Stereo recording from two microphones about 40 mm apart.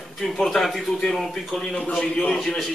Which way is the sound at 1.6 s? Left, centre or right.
Left.